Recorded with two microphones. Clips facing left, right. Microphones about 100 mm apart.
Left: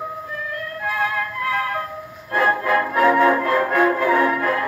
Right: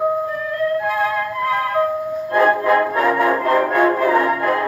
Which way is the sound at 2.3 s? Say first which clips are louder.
Right 4 dB; 15° right (ahead or behind).